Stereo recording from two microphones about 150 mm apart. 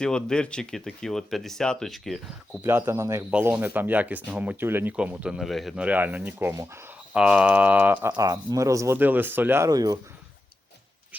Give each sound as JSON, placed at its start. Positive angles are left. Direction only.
{"t": 0.0, "sound": "speech", "side_deg": 5}
{"t": 2.6, "sound": "speech", "side_deg": -15}
{"t": 8.1, "sound": "speech", "side_deg": -25}